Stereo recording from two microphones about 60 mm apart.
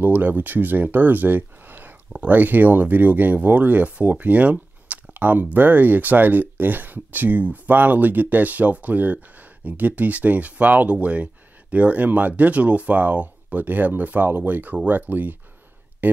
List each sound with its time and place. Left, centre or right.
0.0 s speech: right